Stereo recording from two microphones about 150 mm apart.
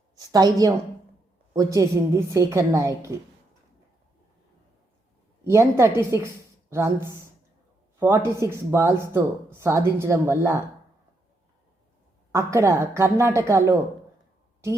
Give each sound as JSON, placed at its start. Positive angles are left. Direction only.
{"t": 0.2, "sound": "a woman's voice", "side_deg": -25}
{"t": 5.5, "sound": "speech", "side_deg": -15}
{"t": 12.3, "sound": "a woman's voice", "side_deg": -20}